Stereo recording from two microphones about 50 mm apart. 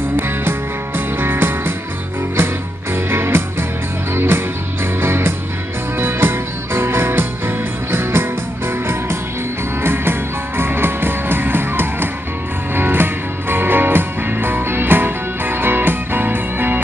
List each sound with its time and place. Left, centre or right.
0.1 s music: right
10.6 s music: right